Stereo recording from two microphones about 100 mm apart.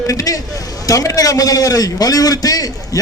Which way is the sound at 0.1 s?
35° left (ahead or behind).